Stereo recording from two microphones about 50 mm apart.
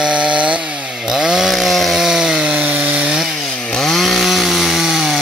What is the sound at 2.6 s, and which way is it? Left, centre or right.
Chainsaw, right.